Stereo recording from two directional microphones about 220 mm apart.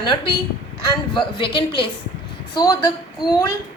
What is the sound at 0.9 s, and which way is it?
A woman's voice, 20° left (ahead or behind).